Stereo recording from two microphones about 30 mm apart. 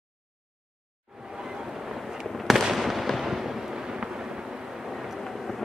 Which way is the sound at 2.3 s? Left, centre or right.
Centre.